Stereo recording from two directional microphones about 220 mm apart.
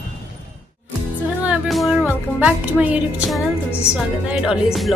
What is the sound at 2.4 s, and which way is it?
A woman's voice, 5° right (ahead or behind).